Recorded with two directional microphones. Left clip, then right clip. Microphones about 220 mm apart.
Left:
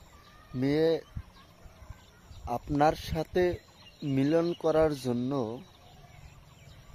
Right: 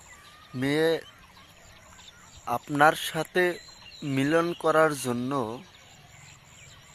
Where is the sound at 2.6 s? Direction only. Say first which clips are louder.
Right 5 dB; centre (ahead or behind).